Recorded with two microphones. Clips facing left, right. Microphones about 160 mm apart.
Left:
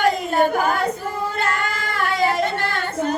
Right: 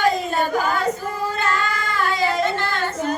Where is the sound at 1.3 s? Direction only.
55° left (ahead or behind).